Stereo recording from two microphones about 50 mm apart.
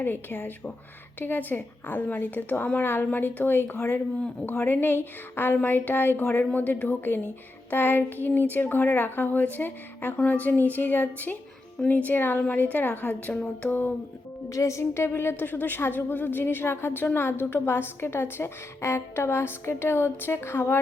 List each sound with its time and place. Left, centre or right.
0.0 s a woman's voice: left
14.5 s a woman's voice: left